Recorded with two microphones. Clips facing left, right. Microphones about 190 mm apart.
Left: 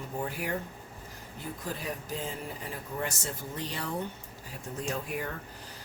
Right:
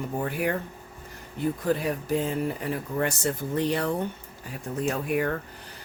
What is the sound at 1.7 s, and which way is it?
Speech, 65° right (ahead or behind).